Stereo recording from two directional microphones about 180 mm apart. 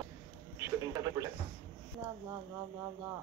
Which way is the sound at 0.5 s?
15° right (ahead or behind).